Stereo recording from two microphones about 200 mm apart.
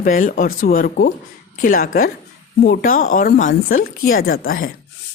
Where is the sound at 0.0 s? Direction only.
40° left (ahead or behind).